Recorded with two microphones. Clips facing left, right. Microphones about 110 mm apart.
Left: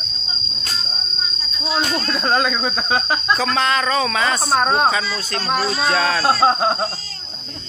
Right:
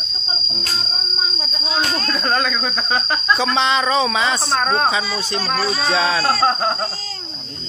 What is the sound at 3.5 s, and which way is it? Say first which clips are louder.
Speech: right 1 dB; 25° right (ahead or behind).